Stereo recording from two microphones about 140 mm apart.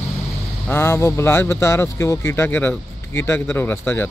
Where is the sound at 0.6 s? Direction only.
15° left (ahead or behind).